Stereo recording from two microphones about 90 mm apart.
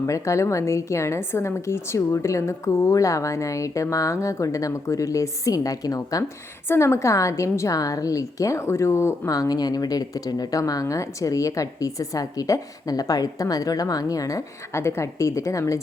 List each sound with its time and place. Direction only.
0.0 s speech: 35° left (ahead or behind)
6.7 s speech: 30° left (ahead or behind)
9.3 s speech: 45° left (ahead or behind)